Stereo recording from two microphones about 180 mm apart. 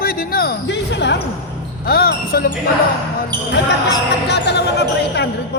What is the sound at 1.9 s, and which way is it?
Speech, 55° left (ahead or behind).